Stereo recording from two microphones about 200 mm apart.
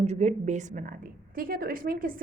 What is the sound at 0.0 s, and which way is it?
A woman's voice, 35° right (ahead or behind).